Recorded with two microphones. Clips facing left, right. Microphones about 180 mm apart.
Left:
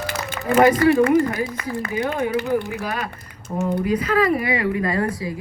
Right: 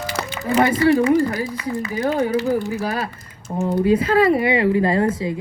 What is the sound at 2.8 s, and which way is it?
A woman's voice, 35° right (ahead or behind).